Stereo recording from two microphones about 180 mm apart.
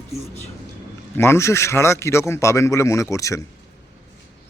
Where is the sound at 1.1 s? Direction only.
15° left (ahead or behind).